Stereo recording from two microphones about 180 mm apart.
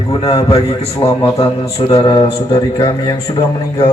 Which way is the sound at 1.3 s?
20° left (ahead or behind).